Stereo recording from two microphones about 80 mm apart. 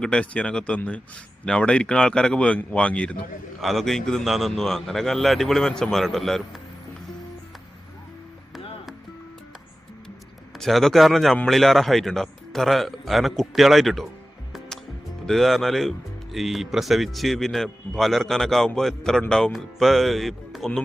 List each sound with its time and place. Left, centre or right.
0.0 s speech: centre
3.6 s speech: centre
10.6 s speech: centre
15.3 s speech: centre